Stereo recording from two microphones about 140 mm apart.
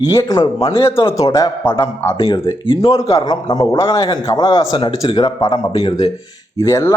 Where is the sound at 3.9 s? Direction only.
35° left (ahead or behind).